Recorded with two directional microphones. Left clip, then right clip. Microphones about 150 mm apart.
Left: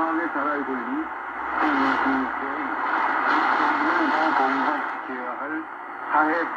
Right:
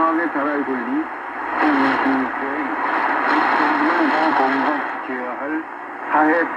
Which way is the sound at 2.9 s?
20° right (ahead or behind).